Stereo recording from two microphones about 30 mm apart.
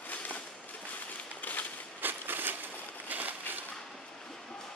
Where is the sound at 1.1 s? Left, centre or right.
Left.